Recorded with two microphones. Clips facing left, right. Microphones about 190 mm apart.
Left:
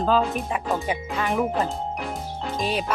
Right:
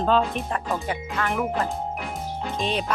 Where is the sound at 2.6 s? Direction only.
5° left (ahead or behind).